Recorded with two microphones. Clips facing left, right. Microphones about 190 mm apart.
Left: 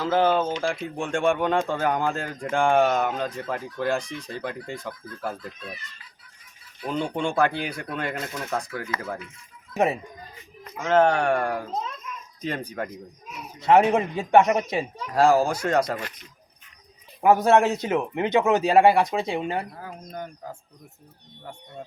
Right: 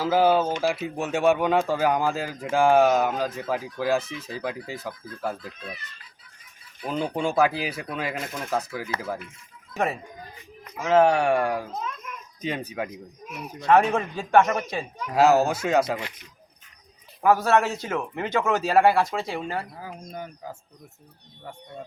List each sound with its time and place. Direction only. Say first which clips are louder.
0.0 s speech: right 1 dB; 5° right (ahead or behind)
7.0 s speech: right 1 dB; 5° right (ahead or behind)
9.7 s a man's voice: left 4 dB; 20° left (ahead or behind)
10.8 s speech: right 1 dB; 5° right (ahead or behind)
11.7 s a sound: left 2 dB; 30° left (ahead or behind)
12.4 s speech: even; 5° right (ahead or behind)
13.7 s a man's voice: left 2 dB; 20° left (ahead or behind)
15.1 s speech: even; 5° right (ahead or behind)
17.2 s a man's voice: left 3 dB; 20° left (ahead or behind)
19.8 s speech: even; 10° right (ahead or behind)